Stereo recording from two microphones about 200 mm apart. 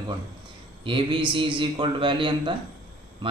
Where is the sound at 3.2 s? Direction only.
25° right (ahead or behind).